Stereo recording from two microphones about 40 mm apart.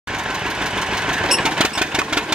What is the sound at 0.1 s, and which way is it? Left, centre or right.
Engine, centre.